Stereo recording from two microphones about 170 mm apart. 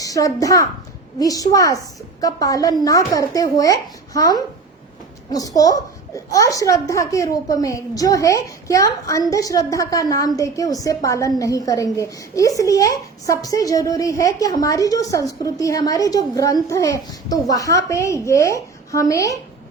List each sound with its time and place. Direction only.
0.0 s a child's voice: 20° left (ahead or behind)